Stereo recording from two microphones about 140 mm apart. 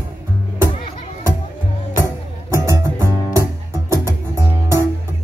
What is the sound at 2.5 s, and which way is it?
Music, 20° right (ahead or behind).